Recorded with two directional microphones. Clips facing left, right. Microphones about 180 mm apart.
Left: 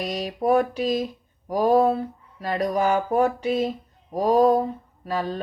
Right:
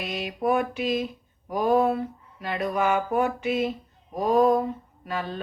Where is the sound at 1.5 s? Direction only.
35° left (ahead or behind).